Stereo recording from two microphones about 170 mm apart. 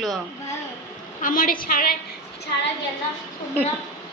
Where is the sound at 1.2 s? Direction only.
55° left (ahead or behind).